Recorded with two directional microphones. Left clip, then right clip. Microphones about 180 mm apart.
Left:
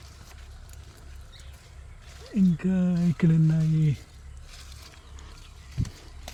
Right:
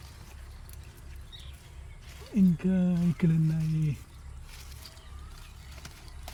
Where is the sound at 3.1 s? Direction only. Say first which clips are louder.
Left 5 dB; 50° left (ahead or behind).